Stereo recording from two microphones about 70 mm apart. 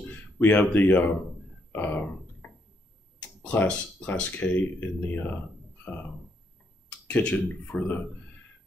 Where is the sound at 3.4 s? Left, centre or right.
Centre.